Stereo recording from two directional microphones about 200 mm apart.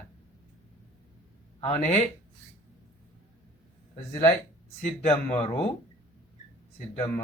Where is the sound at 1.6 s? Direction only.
30° left (ahead or behind).